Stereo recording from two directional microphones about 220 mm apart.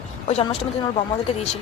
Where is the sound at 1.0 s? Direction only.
30° left (ahead or behind).